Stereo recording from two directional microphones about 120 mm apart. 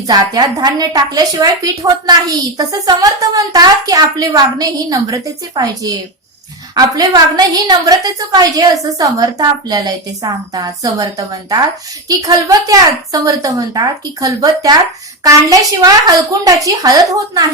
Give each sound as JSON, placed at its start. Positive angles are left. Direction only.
{"t": 0.1, "sound": "a woman's voice", "side_deg": -35}